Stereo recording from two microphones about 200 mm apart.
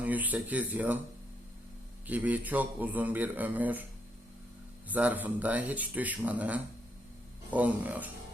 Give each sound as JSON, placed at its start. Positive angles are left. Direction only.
{"t": 0.0, "sound": "speech", "side_deg": -10}
{"t": 2.0, "sound": "speech", "side_deg": -10}
{"t": 4.9, "sound": "speech", "side_deg": -10}